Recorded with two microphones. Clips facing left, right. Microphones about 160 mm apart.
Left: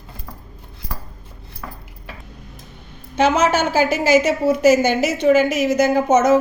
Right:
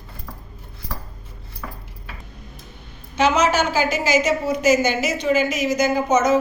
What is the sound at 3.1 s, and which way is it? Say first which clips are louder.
A woman's voice: left 2 dB; 55° left (ahead or behind).